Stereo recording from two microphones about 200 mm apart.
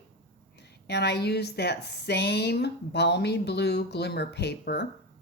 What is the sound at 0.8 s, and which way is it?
A woman's voice, 55° left (ahead or behind).